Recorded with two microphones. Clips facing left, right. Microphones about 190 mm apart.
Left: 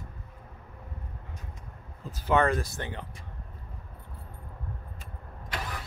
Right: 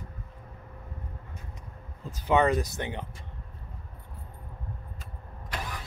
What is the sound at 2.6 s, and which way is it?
Speech, 20° right (ahead or behind).